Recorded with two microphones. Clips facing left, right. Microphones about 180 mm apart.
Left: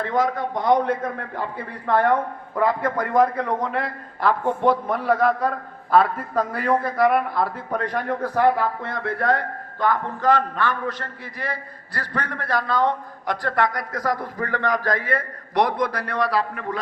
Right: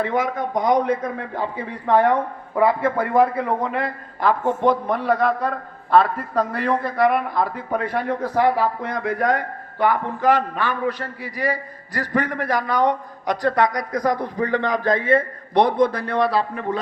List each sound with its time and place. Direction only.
0.0 s a man's voice: 20° right (ahead or behind)